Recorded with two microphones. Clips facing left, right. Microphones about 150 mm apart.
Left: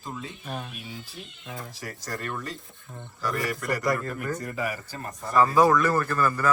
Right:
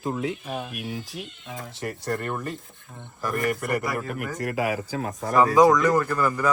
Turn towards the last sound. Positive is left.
turn(degrees=-15)  # may be behind; listen again after turning